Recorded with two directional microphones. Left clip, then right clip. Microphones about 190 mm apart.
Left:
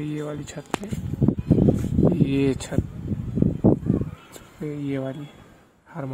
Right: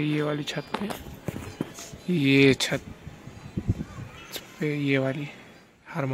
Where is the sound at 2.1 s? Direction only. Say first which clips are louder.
Right 3 dB; centre (ahead or behind).